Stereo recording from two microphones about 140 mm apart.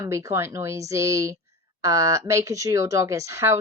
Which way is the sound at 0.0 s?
20° right (ahead or behind).